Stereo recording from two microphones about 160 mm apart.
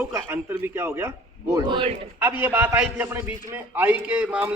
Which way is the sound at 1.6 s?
30° right (ahead or behind).